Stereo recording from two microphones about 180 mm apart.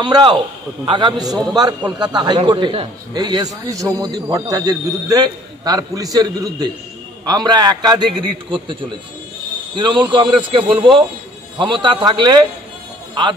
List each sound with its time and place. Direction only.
0.0 s a man's voice: 25° right (ahead or behind)
9.8 s a man's voice: 25° right (ahead or behind)